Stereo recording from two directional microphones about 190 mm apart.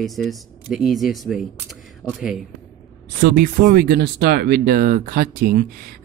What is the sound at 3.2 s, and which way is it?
Speech, 50° right (ahead or behind).